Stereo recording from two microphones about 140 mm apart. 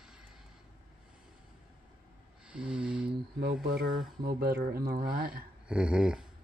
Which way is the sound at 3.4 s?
90° right.